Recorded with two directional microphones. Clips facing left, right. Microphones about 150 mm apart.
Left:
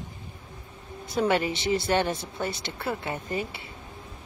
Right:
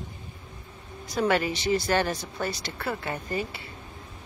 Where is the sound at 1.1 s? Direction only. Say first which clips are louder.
Even; 25° left (ahead or behind).